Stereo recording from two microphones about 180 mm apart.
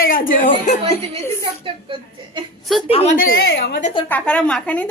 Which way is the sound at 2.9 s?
35° left (ahead or behind).